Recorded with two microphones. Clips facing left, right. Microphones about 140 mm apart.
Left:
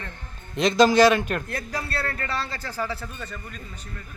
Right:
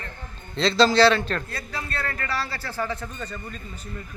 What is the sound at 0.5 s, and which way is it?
Speech, 15° left (ahead or behind).